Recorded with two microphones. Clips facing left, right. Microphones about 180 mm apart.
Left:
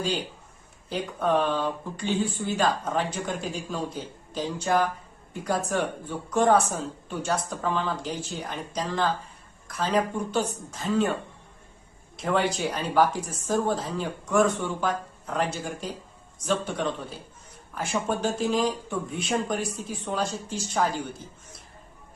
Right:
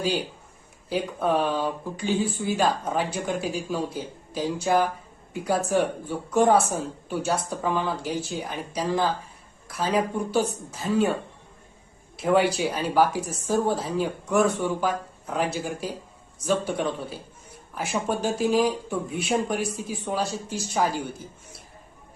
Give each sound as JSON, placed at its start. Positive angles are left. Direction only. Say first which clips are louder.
{"t": 0.9, "sound": "speech", "louder": "right 1 dB", "side_deg": -5}
{"t": 12.1, "sound": "speech", "louder": "right 4 dB", "side_deg": -10}